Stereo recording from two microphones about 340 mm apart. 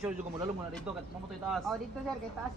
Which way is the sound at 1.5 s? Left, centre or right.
Centre.